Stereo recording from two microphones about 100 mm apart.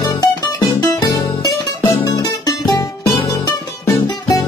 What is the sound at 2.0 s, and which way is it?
Music, 45° left (ahead or behind).